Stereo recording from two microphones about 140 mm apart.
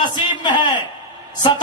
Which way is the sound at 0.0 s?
30° left (ahead or behind).